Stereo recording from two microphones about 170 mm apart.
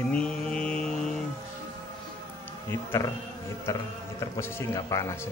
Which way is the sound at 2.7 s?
15° left (ahead or behind).